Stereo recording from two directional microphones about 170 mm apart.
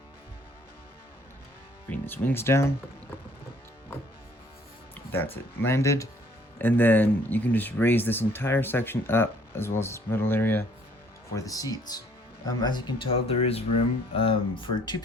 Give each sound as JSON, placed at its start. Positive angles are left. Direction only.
{"t": 1.9, "sound": "speech", "side_deg": 10}
{"t": 5.1, "sound": "speech", "side_deg": 15}